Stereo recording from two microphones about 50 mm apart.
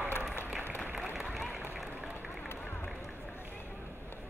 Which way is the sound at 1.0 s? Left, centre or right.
Centre.